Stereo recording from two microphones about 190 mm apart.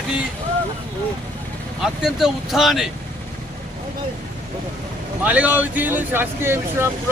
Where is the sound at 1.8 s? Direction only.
Centre (ahead or behind).